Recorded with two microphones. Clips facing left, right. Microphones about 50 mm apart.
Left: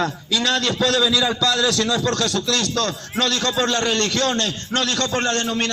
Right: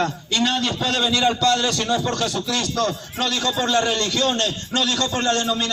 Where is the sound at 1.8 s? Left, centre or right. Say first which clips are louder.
Left 1 dB; left.